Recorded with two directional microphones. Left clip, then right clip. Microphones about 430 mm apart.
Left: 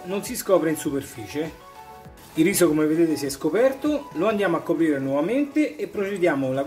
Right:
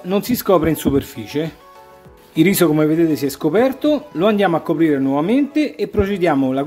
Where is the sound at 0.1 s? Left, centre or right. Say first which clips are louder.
Right 6 dB; right.